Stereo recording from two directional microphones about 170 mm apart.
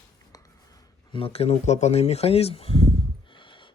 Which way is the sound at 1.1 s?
35° left (ahead or behind).